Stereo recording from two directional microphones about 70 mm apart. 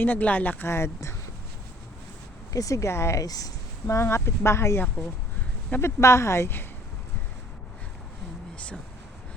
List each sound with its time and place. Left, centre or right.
0.0 s speech: left
0.7 s speech: left
2.5 s speech: left
3.2 s speech: left
3.8 s speech: left
5.8 s speech: left
8.5 s a sound: centre